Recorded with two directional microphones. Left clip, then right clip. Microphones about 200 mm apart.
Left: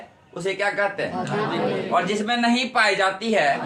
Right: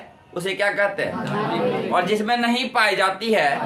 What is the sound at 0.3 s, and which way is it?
A man's voice, 35° right (ahead or behind).